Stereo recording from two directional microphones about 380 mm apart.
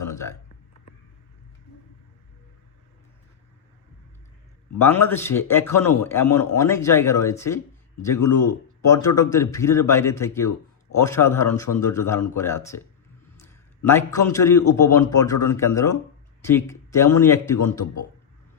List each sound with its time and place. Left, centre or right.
0.1 s a sound: centre
4.8 s a man's voice: centre
8.9 s a man's voice: centre
17.8 s a man's voice: left